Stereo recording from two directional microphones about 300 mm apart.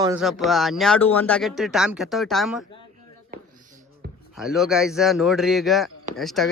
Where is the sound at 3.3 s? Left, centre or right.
Right.